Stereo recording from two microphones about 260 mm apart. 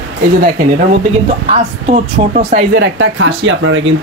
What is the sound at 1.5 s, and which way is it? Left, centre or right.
Speech, right.